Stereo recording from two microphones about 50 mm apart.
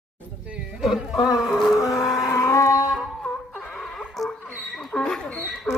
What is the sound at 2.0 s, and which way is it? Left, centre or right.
Vehicle, left.